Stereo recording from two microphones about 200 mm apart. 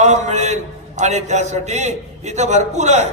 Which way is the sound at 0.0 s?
35° right (ahead or behind).